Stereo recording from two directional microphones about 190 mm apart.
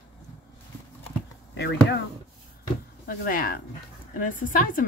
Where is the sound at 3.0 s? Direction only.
50° left (ahead or behind).